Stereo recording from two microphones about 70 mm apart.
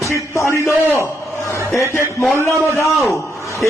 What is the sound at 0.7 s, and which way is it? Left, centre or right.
A man's voice, left.